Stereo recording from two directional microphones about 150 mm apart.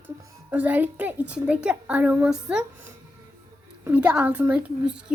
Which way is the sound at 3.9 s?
10° right (ahead or behind).